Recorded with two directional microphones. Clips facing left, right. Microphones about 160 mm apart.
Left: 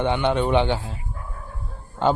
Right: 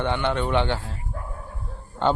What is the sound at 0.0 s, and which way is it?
Speech, 15° left (ahead or behind).